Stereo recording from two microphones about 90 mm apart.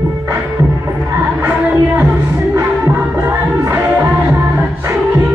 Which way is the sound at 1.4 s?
25° right (ahead or behind).